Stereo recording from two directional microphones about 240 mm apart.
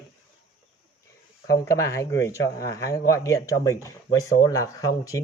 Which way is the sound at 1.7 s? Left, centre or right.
Centre.